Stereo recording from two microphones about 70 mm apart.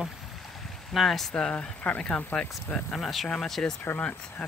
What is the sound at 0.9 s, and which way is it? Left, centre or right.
Speech, centre.